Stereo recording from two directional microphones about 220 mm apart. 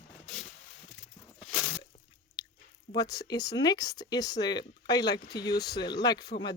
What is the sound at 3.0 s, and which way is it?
Speech, 15° left (ahead or behind).